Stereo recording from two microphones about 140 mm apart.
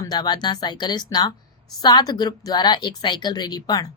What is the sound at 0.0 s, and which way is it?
A woman's voice, 30° left (ahead or behind).